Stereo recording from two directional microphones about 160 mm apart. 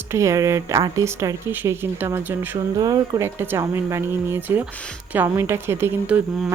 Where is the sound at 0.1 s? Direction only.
20° right (ahead or behind).